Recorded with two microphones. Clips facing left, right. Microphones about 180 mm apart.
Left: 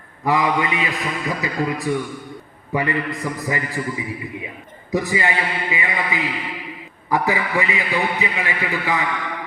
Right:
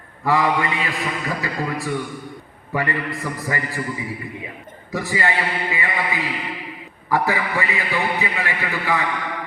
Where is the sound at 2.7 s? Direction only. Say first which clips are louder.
Left 2 dB; 15° left (ahead or behind).